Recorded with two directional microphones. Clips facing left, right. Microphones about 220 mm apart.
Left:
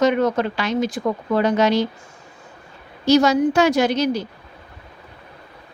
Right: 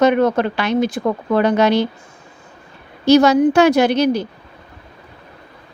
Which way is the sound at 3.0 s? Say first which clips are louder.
Right 4 dB; 65° right (ahead or behind).